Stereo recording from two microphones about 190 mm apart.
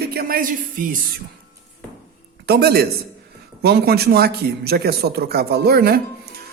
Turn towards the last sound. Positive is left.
turn(degrees=-55)  # may be behind; listen again after turning